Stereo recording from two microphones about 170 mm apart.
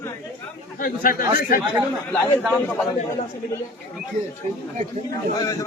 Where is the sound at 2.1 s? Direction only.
Centre (ahead or behind).